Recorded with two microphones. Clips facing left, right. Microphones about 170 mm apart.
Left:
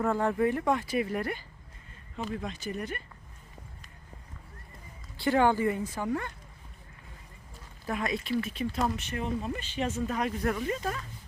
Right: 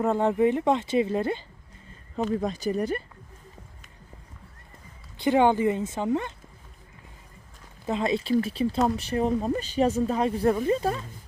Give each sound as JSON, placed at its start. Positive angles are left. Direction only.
{"t": 0.0, "sound": "speech", "side_deg": -20}
{"t": 2.3, "sound": "speech", "side_deg": -35}
{"t": 5.1, "sound": "speech", "side_deg": -20}
{"t": 7.9, "sound": "speech", "side_deg": -25}